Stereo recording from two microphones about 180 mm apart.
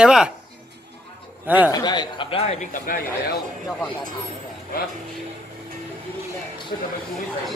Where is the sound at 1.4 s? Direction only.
10° right (ahead or behind).